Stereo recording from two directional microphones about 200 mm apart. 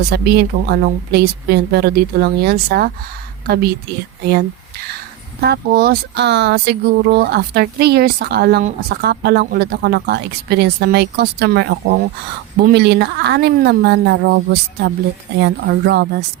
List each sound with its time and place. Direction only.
0.1 s a woman's voice: 55° right (ahead or behind)
5.4 s a woman's voice: 50° right (ahead or behind)